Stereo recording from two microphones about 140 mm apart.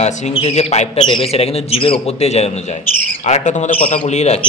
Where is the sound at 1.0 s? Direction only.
40° left (ahead or behind).